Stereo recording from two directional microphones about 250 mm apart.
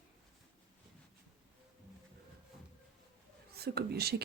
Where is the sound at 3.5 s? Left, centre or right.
Right.